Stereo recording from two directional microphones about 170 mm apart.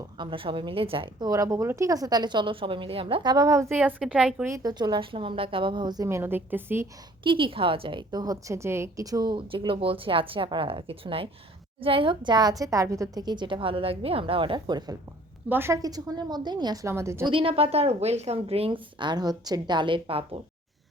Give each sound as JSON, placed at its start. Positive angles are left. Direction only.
{"t": 0.2, "sound": "a woman's voice", "side_deg": -30}
{"t": 4.4, "sound": "a woman's voice", "side_deg": -20}
{"t": 7.3, "sound": "a woman's voice", "side_deg": -30}
{"t": 15.4, "sound": "a woman's voice", "side_deg": -15}
{"t": 17.3, "sound": "a woman's voice", "side_deg": -35}